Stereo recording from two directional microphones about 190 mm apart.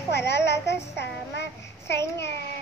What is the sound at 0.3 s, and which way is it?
Speech, 65° left (ahead or behind).